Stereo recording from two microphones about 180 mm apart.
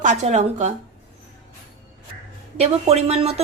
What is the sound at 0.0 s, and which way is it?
Speech, 40° right (ahead or behind).